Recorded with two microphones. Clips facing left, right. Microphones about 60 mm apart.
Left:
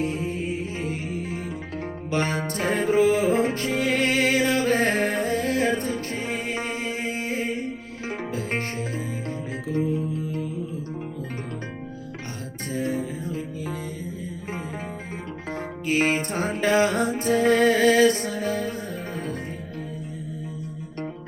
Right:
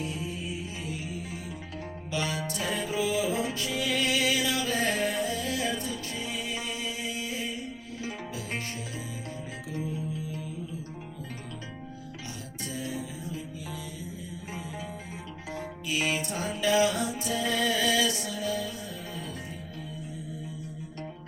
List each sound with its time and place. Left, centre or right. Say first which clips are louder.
0.0 s music: left 8 dB; left
12.7 s music: left 9 dB; left
15.5 s music: left 8 dB; left